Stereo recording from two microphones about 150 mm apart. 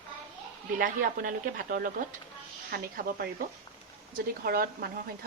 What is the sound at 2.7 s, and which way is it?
Speech, 85° right.